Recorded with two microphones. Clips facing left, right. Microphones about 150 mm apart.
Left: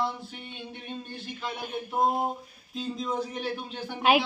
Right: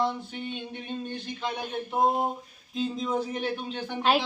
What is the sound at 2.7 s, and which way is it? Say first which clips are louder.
Speech: right 3 dB; centre (ahead or behind).